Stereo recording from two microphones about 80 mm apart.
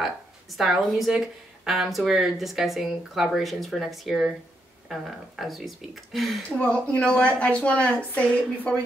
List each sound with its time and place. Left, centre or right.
0.6 s a woman's voice: centre
6.6 s a woman's voice: centre